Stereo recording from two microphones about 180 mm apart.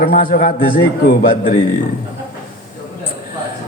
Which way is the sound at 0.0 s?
50° left (ahead or behind).